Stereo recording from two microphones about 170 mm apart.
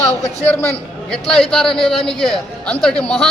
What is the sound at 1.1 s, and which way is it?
A man's voice, 5° left (ahead or behind).